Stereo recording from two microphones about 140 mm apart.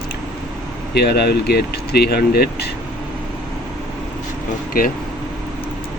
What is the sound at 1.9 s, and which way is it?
Speech, 90° left.